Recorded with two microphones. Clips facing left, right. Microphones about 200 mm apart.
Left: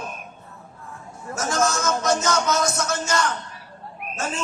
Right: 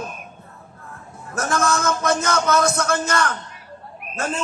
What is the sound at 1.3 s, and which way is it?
Speech, 55° right (ahead or behind).